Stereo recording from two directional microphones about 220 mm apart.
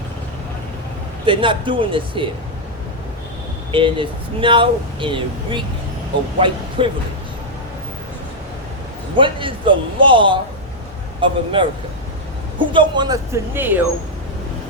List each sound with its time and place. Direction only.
1.2 s speech: 25° right (ahead or behind)
3.7 s speech: 20° right (ahead or behind)
9.1 s speech: 20° right (ahead or behind)
12.5 s speech: 20° right (ahead or behind)